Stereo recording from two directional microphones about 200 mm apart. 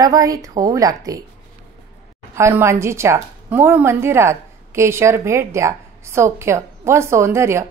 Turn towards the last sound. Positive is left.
turn(degrees=-15)  # may be behind; listen again after turning